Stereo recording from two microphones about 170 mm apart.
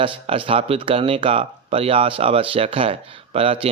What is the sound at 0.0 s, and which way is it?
Speech, 30° right (ahead or behind).